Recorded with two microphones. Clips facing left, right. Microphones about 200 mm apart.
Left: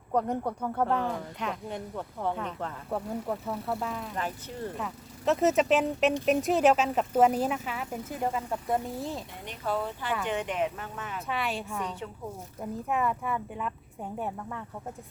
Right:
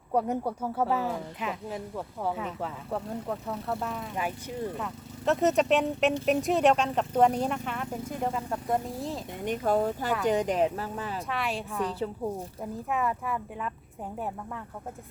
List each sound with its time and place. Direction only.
0.1 s speech: 10° right (ahead or behind)
9.4 s speech: 45° right (ahead or behind)
11.3 s speech: centre (ahead or behind)